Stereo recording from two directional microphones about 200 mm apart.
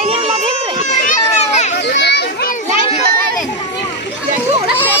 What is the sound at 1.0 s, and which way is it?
Children playing, 35° left (ahead or behind).